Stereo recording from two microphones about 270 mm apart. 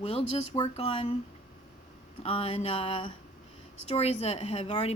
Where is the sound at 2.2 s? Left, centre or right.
Left.